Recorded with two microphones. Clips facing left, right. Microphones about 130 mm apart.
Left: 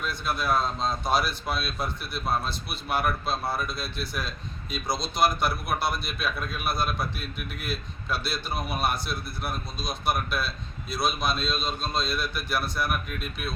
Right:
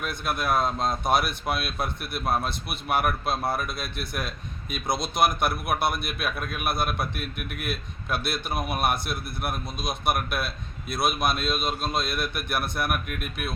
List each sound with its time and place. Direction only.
0.0 s a man's voice: 55° right (ahead or behind)